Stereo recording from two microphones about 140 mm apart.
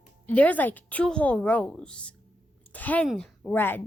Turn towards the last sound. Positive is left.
turn(degrees=15)  # may be behind; listen again after turning